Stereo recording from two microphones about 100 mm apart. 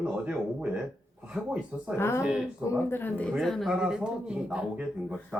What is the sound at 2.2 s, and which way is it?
Speech, 10° right (ahead or behind).